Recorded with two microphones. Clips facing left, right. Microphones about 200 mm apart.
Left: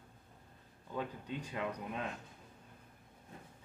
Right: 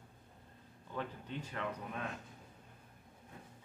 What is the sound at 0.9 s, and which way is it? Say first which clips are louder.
Speech: left 2 dB; 10° left (ahead or behind).